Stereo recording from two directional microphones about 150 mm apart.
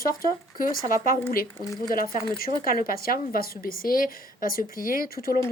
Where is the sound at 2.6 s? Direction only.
75° left (ahead or behind).